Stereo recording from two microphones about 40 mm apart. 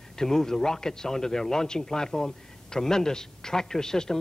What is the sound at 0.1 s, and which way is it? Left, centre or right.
A man's voice, centre.